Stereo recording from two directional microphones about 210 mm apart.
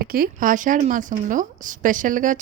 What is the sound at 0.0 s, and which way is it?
A woman's voice, 45° right (ahead or behind).